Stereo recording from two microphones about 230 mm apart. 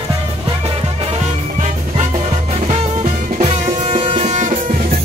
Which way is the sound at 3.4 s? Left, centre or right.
Right.